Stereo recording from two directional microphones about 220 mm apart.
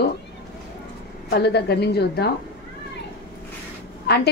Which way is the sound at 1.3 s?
50° left (ahead or behind).